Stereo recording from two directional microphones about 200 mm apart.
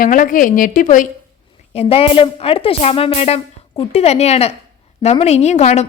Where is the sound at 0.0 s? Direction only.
40° left (ahead or behind).